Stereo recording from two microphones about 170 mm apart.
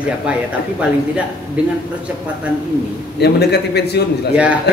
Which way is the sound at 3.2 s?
75° left (ahead or behind).